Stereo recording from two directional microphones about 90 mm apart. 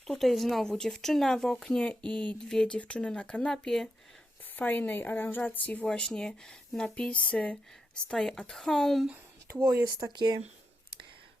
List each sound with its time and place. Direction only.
0.1 s speech: centre (ahead or behind)
4.5 s speech: 20° left (ahead or behind); by 9.0 s centre (ahead or behind)
9.6 s speech: 50° right (ahead or behind)